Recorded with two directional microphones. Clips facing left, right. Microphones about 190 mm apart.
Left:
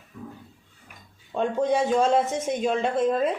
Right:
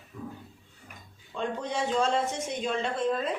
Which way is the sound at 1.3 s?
50° left (ahead or behind).